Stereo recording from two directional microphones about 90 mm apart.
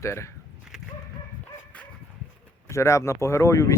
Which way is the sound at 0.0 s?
30° left (ahead or behind).